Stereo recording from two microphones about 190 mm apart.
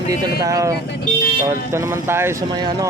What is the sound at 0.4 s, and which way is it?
A man's voice, 15° right (ahead or behind).